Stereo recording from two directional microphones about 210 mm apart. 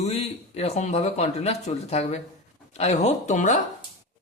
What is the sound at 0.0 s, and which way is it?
Speech, 30° left (ahead or behind).